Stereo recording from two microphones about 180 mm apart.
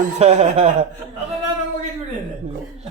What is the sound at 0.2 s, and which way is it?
Speech, 40° right (ahead or behind).